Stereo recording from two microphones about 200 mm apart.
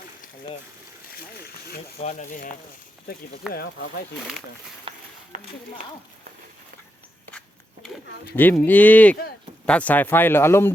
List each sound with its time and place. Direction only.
1.4 s speech: 50° left (ahead or behind)
2.0 s speech: 35° left (ahead or behind)
3.5 s speech: 50° left (ahead or behind)
4.9 s a sound: 25° right (ahead or behind)
7.3 s walk: 5° left (ahead or behind)
8.4 s speech: 10° left (ahead or behind)